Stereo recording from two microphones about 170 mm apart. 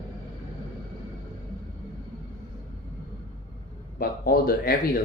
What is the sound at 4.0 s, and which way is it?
Speech, 60° left (ahead or behind).